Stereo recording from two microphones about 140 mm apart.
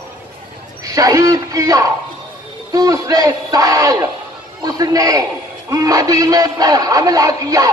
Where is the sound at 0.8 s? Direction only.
25° right (ahead or behind).